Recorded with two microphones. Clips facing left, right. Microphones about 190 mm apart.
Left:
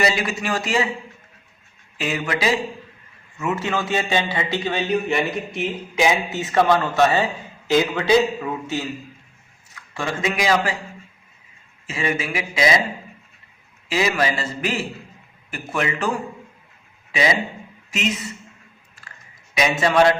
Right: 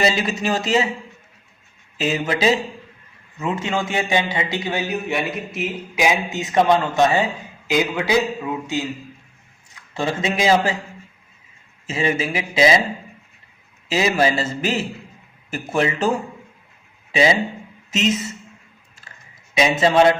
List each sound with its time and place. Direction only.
0.0 s a man's voice: 25° right (ahead or behind)
2.0 s a man's voice: 25° right (ahead or behind); by 5.7 s centre (ahead or behind)
6.0 s a man's voice: 15° right (ahead or behind)
9.9 s a man's voice: 25° right (ahead or behind)
11.9 s a man's voice: 25° right (ahead or behind)
13.9 s a man's voice: 25° right (ahead or behind)
19.8 s a man's voice: 25° right (ahead or behind)